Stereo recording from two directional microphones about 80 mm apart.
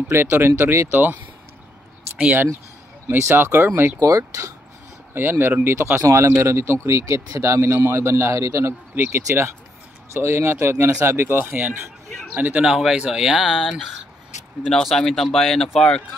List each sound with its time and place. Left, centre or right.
0.1 s speech: right
3.1 s speech: right
5.1 s speech: right
12.4 s speech: centre